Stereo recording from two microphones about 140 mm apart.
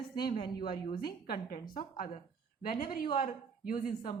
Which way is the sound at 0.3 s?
35° left (ahead or behind).